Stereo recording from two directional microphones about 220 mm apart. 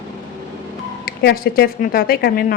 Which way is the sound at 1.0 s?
45° left (ahead or behind).